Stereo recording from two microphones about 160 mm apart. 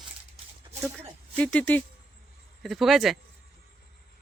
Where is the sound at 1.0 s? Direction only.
10° left (ahead or behind).